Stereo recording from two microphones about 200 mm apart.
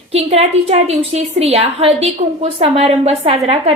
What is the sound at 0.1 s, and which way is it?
A woman's voice, 30° right (ahead or behind).